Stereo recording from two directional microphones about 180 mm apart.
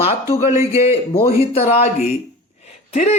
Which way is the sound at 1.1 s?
30° left (ahead or behind).